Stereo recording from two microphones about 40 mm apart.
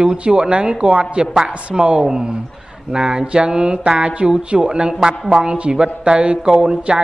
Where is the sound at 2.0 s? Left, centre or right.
Centre.